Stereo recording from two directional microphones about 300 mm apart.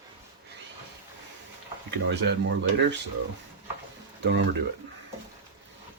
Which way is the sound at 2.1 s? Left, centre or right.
Right.